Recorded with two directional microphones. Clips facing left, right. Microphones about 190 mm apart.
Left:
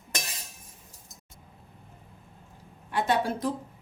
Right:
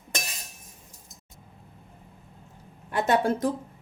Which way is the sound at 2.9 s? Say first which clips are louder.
Right 3 dB; 45° right (ahead or behind).